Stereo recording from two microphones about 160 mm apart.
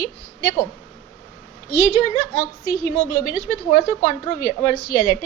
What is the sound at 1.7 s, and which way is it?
A woman's voice, 25° left (ahead or behind).